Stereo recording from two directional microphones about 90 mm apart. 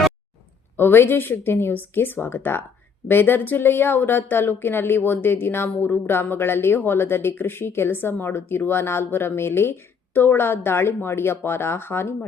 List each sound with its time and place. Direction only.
0.8 s speech: 25° left (ahead or behind)